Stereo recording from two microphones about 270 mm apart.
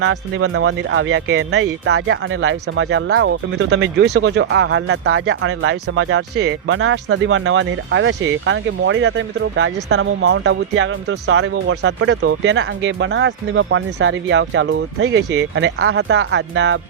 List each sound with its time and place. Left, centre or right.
0.0 s speech: right